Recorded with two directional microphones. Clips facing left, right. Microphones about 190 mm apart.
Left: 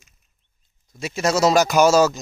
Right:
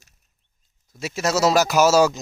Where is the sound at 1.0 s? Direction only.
5° right (ahead or behind).